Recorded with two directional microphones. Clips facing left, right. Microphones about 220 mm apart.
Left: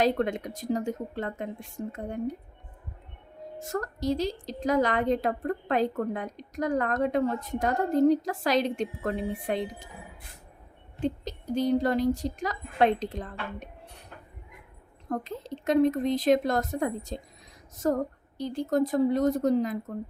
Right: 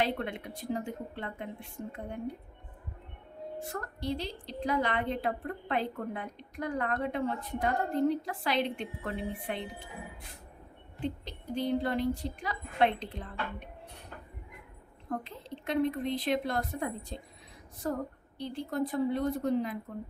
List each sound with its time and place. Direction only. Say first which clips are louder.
0.0 s a woman's voice: left 7 dB; 40° left (ahead or behind)
3.7 s a woman's voice: left 8 dB; 40° left (ahead or behind)
11.0 s a woman's voice: left 6 dB; 40° left (ahead or behind)
15.6 s a woman's voice: left 7 dB; 45° left (ahead or behind)